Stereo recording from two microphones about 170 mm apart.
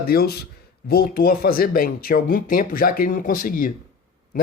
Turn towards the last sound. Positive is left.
turn(degrees=55)  # may be behind; listen again after turning